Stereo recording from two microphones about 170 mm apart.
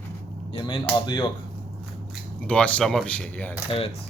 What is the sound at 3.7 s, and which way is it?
Speech, 35° left (ahead or behind).